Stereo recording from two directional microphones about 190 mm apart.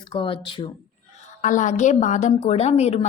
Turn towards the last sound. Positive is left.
turn(degrees=35)  # may be behind; listen again after turning